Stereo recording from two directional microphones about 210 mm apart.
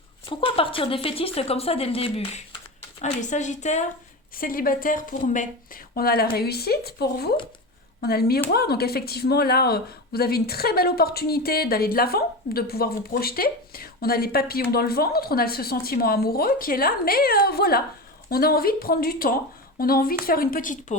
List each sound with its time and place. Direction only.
0.3 s speech: 25° left (ahead or behind)